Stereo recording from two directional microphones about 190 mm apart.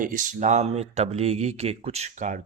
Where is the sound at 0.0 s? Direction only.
45° right (ahead or behind).